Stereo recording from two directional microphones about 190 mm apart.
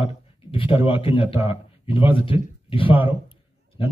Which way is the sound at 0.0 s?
30° left (ahead or behind).